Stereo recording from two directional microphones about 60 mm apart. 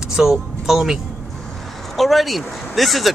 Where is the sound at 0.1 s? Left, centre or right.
Centre.